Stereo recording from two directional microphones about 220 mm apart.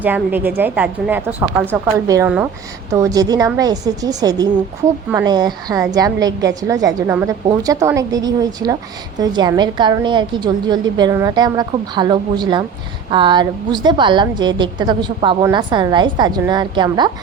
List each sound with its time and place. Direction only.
0.0 s a woman's voice: 10° right (ahead or behind)